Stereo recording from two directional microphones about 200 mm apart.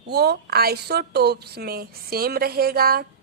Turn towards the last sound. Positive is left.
turn(degrees=-50)  # may be behind; listen again after turning